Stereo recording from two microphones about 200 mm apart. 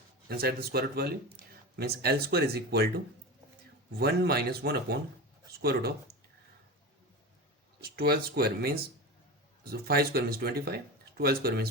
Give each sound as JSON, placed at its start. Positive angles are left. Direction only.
{"t": 0.3, "sound": "speech", "side_deg": -50}
{"t": 7.8, "sound": "speech", "side_deg": -50}